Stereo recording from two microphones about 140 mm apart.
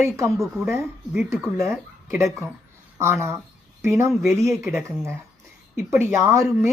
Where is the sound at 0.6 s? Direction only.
15° right (ahead or behind).